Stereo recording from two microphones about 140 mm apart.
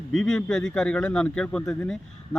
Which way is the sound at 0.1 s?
5° left (ahead or behind).